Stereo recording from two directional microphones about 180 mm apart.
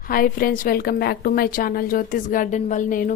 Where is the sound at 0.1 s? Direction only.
50° left (ahead or behind).